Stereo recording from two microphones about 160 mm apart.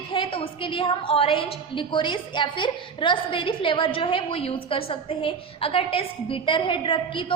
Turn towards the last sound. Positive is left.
turn(degrees=30)  # may be behind; listen again after turning